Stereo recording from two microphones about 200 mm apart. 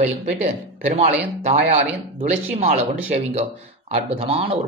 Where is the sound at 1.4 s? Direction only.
35° right (ahead or behind).